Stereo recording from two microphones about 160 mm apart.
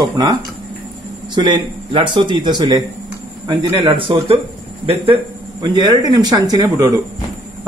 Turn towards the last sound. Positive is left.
turn(degrees=-25)  # may be behind; listen again after turning